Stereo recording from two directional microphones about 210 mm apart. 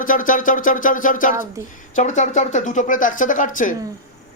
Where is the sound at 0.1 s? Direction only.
40° left (ahead or behind).